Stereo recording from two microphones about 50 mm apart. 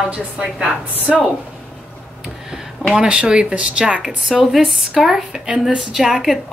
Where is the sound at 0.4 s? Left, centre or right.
Centre.